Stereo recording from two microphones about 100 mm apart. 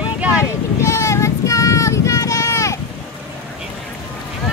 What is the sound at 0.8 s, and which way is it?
Child singing, 30° left (ahead or behind).